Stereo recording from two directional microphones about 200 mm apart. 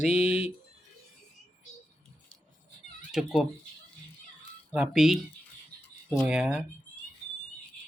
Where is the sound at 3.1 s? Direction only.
Centre (ahead or behind).